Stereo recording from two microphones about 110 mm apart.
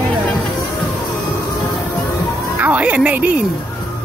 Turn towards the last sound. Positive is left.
turn(degrees=-15)  # may be behind; listen again after turning